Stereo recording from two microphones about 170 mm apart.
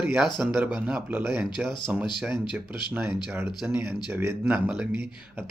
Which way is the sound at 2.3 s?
25° left (ahead or behind).